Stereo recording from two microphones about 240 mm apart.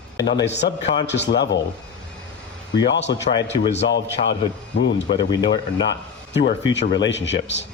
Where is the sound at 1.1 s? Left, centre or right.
Left.